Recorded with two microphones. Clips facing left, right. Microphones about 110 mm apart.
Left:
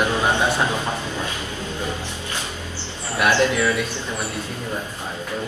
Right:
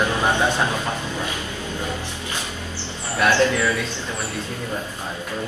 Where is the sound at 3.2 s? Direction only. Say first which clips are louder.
Even; 15° left (ahead or behind).